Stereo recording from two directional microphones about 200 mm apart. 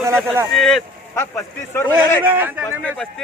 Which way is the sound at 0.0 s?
15° right (ahead or behind).